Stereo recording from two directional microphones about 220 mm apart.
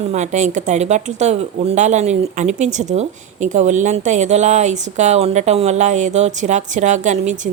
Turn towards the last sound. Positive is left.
turn(degrees=-35)  # may be behind; listen again after turning